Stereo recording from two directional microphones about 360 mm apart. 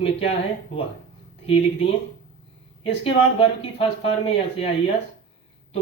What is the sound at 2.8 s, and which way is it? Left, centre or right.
A man's voice, centre.